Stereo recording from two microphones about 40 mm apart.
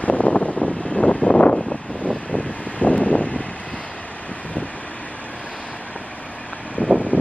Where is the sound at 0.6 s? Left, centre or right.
Left.